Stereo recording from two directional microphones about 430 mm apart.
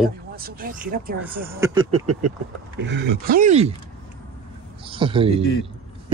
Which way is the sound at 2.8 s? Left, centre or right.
Right.